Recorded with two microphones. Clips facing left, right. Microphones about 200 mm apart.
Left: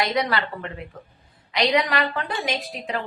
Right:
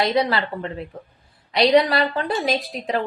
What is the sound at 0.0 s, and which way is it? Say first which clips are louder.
A woman's voice: right 3 dB; 30° right (ahead or behind).